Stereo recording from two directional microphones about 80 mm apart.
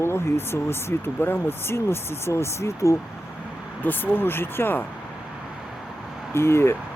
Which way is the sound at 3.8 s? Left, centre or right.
Left.